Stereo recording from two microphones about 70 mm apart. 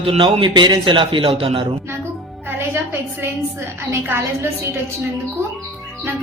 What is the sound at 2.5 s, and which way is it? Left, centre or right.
Music, right.